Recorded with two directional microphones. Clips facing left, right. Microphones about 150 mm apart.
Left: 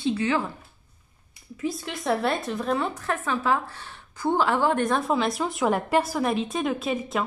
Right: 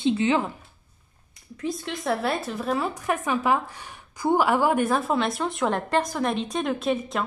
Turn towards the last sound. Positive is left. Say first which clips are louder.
# right 1 dB
turn(degrees=0)  # may be behind; listen again after turning